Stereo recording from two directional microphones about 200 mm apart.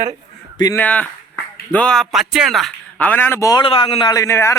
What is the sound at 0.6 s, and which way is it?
A man's voice, 10° left (ahead or behind).